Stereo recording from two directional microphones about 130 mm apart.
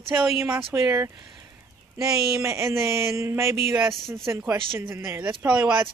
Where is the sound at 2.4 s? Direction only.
20° right (ahead or behind).